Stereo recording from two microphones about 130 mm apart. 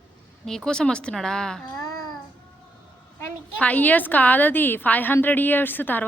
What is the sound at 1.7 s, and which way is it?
Babbling, 30° left (ahead or behind).